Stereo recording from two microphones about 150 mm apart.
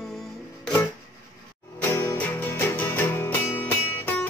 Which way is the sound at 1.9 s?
15° left (ahead or behind).